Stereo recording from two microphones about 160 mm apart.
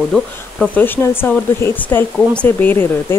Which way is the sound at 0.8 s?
15° left (ahead or behind).